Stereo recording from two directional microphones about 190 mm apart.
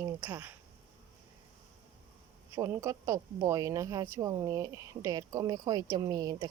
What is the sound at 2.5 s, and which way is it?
Speech, 15° right (ahead or behind).